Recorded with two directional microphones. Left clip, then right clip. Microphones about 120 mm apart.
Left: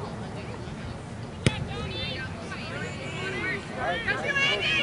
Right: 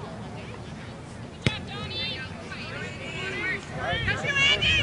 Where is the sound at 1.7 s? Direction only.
40° right (ahead or behind).